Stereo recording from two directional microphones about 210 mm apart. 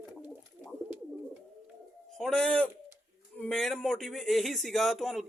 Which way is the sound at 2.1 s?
Centre (ahead or behind).